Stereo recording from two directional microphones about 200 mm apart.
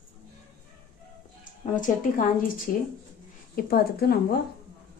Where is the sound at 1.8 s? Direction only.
40° left (ahead or behind).